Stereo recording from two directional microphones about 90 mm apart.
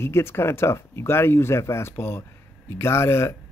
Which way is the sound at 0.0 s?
30° left (ahead or behind).